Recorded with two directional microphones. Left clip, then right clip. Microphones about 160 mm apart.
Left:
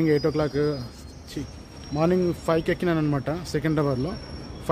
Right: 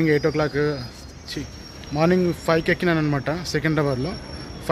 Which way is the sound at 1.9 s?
10° left (ahead or behind).